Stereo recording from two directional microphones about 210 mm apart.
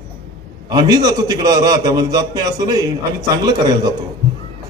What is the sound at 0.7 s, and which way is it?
A man's voice, 20° right (ahead or behind).